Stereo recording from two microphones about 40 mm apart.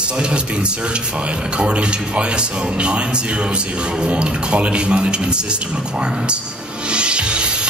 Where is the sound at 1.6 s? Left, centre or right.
Right.